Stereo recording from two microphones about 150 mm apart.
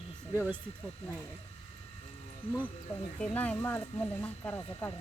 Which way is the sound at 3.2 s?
10° left (ahead or behind).